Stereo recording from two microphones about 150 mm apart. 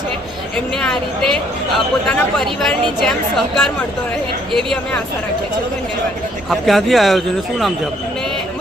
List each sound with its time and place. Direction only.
2.0 s a woman's voice: 5° left (ahead or behind)
6.5 s a woman's voice: centre (ahead or behind)